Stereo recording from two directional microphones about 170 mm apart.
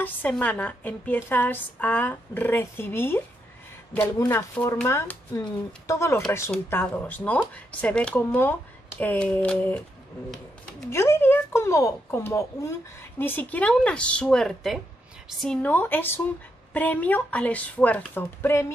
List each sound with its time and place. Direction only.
0.0 s speech: 10° left (ahead or behind)
10.9 s speech: 15° left (ahead or behind)